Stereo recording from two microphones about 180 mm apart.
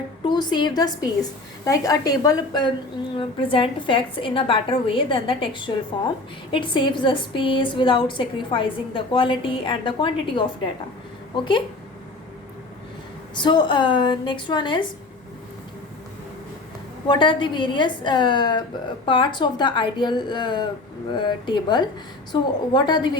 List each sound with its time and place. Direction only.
0.3 s a woman's voice: 25° left (ahead or behind)
13.3 s a woman's voice: 25° left (ahead or behind)
17.1 s a woman's voice: 25° left (ahead or behind)